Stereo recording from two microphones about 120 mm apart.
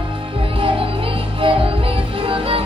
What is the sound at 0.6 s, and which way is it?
Music, 50° right (ahead or behind).